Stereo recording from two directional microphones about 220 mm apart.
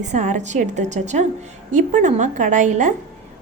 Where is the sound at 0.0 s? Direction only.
35° right (ahead or behind).